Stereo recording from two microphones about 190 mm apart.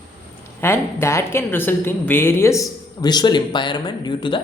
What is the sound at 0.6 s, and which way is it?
A woman's voice, 15° left (ahead or behind).